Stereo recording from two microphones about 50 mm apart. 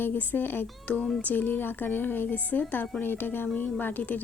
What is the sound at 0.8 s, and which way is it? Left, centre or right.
Speech, left.